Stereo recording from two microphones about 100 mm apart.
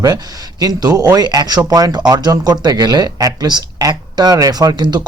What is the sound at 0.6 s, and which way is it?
Speech, 40° right (ahead or behind).